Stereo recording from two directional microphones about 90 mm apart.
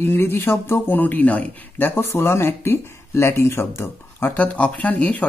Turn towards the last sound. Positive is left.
turn(degrees=15)  # may be behind; listen again after turning